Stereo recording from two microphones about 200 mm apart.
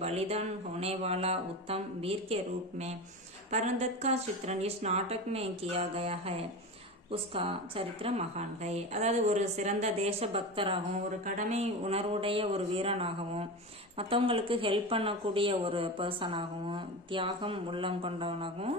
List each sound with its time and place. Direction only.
0.0 s a woman's voice: 30° right (ahead or behind)